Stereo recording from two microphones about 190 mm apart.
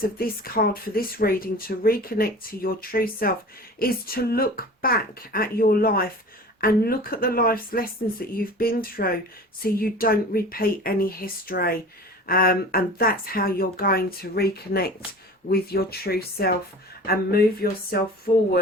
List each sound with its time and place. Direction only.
0.2 s speech: 50° left (ahead or behind)